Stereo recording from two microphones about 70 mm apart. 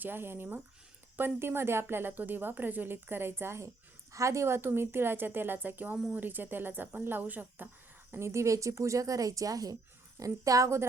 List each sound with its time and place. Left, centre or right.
0.0 s speech: right
8.1 s speech: right